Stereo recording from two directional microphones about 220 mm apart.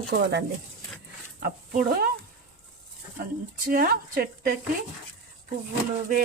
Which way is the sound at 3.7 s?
40° right (ahead or behind).